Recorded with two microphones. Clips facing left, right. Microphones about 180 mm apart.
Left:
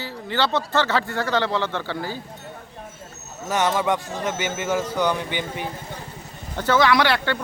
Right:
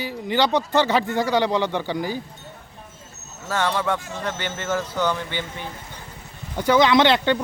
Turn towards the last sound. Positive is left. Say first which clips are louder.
# right 3 dB
turn(degrees=-20)  # may be behind; listen again after turning